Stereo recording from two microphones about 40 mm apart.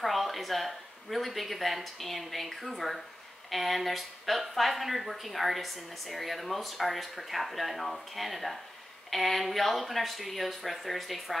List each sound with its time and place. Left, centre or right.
0.0 s speech: centre